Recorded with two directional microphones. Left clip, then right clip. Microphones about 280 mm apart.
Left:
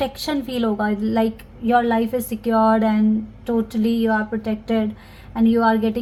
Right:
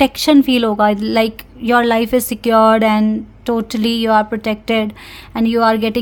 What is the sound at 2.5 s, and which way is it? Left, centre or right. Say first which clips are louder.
Speech: right 7 dB; right.